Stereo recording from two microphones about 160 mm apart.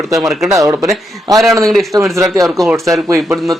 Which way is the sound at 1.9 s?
20° right (ahead or behind).